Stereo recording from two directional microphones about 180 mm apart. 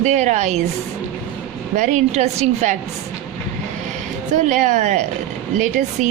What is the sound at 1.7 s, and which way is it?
A woman's voice, 40° right (ahead or behind).